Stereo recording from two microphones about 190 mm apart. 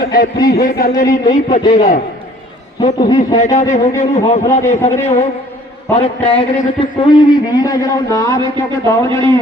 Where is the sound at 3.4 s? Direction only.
35° left (ahead or behind).